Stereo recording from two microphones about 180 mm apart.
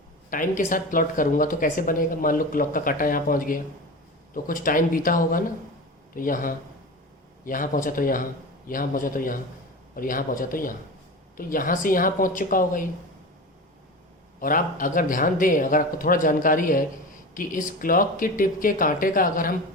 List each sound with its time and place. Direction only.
0.3 s speech: 45° left (ahead or behind)
14.3 s speech: 50° left (ahead or behind)